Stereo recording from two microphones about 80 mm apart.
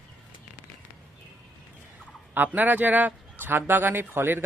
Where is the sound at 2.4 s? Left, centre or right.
Right.